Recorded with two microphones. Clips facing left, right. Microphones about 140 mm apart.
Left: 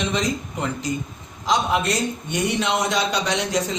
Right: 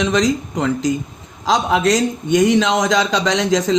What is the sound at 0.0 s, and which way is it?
Speech, 90° right.